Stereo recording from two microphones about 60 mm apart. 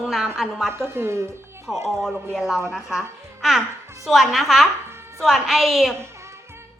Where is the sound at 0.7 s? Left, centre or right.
Right.